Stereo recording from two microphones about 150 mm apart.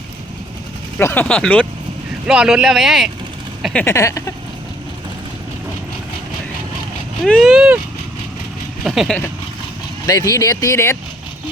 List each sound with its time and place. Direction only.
0.9 s speech: 10° left (ahead or behind)
2.2 s speech: 5° right (ahead or behind)
3.8 s speech: 20° left (ahead or behind)
7.2 s speech: 5° left (ahead or behind)
8.8 s speech: centre (ahead or behind)
10.1 s speech: 25° left (ahead or behind)